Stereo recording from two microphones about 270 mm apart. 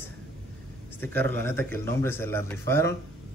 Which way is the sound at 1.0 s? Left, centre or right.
Centre.